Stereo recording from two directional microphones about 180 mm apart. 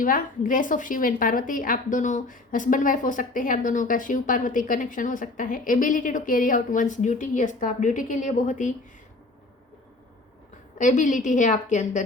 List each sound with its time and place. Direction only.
0.0 s a woman's voice: 50° left (ahead or behind)
10.8 s a woman's voice: 45° left (ahead or behind)